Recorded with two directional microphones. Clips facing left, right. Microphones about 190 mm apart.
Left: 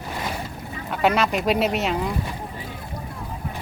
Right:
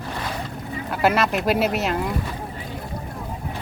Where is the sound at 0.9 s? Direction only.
Centre (ahead or behind).